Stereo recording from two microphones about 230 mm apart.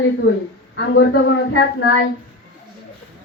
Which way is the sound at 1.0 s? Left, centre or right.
Left.